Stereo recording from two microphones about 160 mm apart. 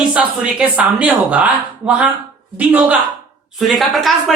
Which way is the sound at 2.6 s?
10° right (ahead or behind).